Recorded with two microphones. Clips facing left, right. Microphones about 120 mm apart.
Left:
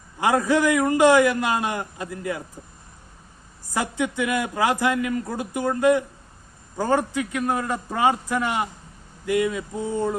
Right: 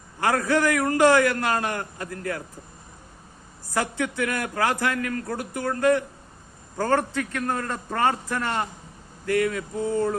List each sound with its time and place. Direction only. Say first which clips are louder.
0.2 s a man's voice: left 2 dB; 15° left (ahead or behind)
3.7 s a man's voice: left 1 dB; 20° left (ahead or behind)
9.2 s a sound: left 1 dB; 20° left (ahead or behind)